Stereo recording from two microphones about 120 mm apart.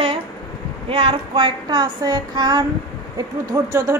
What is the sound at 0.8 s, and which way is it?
Female singing, 50° right (ahead or behind).